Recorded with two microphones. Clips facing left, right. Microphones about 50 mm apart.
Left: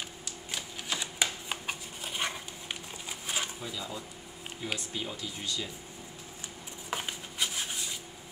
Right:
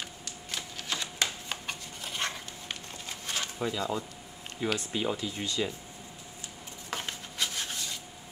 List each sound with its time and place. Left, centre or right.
0.5 s shuffling cards: centre
3.5 s speech: right
6.9 s a sound: centre